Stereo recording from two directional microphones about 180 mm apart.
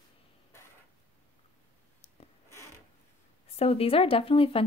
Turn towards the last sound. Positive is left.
turn(degrees=30)  # may be behind; listen again after turning